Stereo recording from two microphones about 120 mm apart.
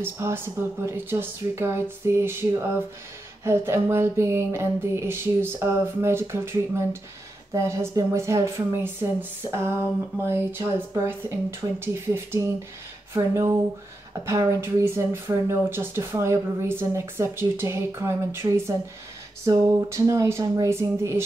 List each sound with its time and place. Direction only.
0.0 s speech: 20° right (ahead or behind)
3.4 s speech: 20° right (ahead or behind)